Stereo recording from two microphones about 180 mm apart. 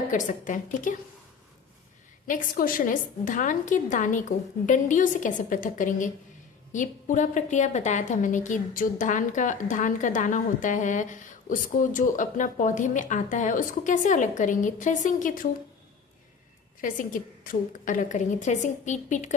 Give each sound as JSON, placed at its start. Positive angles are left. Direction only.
{"t": 0.1, "sound": "a woman's voice", "side_deg": 45}
{"t": 2.2, "sound": "a woman's voice", "side_deg": 50}
{"t": 16.8, "sound": "a woman's voice", "side_deg": 45}